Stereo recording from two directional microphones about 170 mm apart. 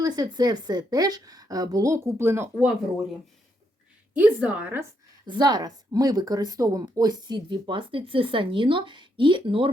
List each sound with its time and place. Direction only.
0.0 s a woman's voice: 25° right (ahead or behind)
4.1 s a woman's voice: 5° right (ahead or behind)
5.2 s a woman's voice: 25° right (ahead or behind)